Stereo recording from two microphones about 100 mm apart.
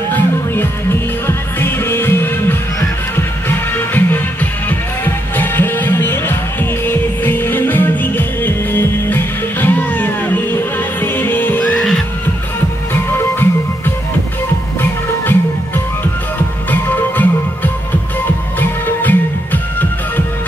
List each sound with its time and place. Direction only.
0.1 s music: 25° left (ahead or behind)
12.9 s music: 20° left (ahead or behind)